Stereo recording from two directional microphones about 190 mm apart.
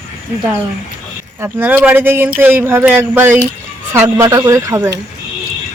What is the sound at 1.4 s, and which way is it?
Speech, 10° right (ahead or behind).